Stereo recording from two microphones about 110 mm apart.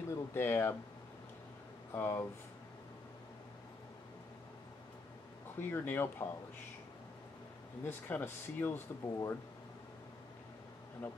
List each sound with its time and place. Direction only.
0.1 s speech: 20° left (ahead or behind)
1.9 s speech: 25° left (ahead or behind)
5.6 s speech: 20° left (ahead or behind)
7.8 s speech: 20° left (ahead or behind)
11.0 s speech: 20° left (ahead or behind)